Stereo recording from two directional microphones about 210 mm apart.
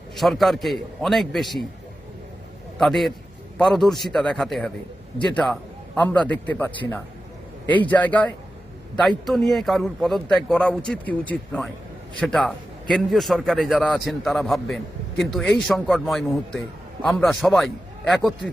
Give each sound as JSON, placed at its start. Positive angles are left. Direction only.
{"t": 0.2, "sound": "speech", "side_deg": 0}
{"t": 2.7, "sound": "a man's voice", "side_deg": 0}